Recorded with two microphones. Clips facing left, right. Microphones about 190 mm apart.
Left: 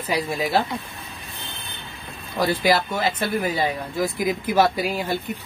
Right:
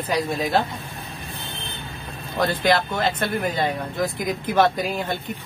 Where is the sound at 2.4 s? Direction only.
5° left (ahead or behind).